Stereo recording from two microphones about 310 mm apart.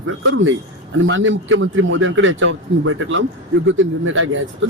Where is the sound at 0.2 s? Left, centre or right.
Right.